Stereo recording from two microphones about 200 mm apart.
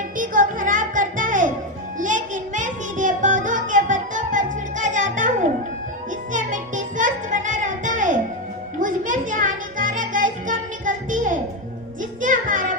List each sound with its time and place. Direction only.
0.2 s music: 40° right (ahead or behind)
6.3 s music: 40° right (ahead or behind)